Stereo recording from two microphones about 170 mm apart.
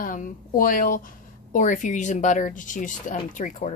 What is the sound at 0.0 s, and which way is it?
A woman's voice, 55° left (ahead or behind).